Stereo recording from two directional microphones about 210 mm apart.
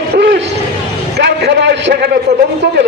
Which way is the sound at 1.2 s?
55° right (ahead or behind).